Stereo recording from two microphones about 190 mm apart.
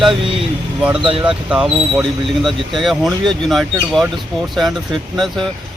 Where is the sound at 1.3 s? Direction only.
5° right (ahead or behind).